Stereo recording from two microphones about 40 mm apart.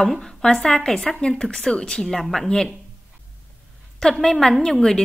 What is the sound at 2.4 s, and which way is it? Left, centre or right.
Speech, centre.